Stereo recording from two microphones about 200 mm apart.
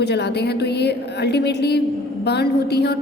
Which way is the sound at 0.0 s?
55° left (ahead or behind).